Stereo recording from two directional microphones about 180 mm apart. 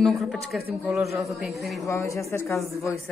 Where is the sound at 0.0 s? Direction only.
Centre (ahead or behind).